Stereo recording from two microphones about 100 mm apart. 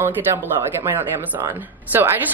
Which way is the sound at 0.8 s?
20° right (ahead or behind).